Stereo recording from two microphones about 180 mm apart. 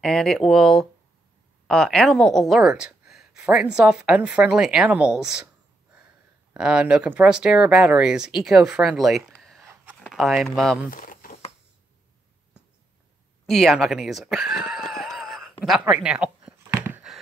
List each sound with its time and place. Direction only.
0.0 s a woman's voice: 5° left (ahead or behind)
6.5 s a woman's voice: 5° right (ahead or behind)
10.9 s a sound: 50° left (ahead or behind)
13.5 s a woman's voice: centre (ahead or behind)
14.9 s screaming: centre (ahead or behind)
15.8 s a sound: 5° right (ahead or behind)